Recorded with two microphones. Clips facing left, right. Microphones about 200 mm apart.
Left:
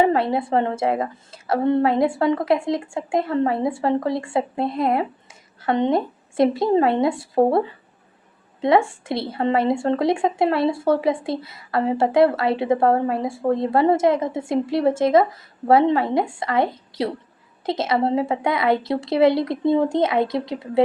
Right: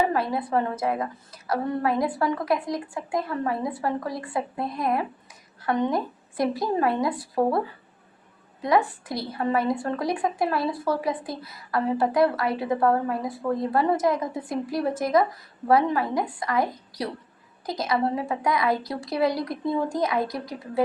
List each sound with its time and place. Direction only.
0.0 s a woman's voice: 25° left (ahead or behind)
8.6 s speech: 25° left (ahead or behind)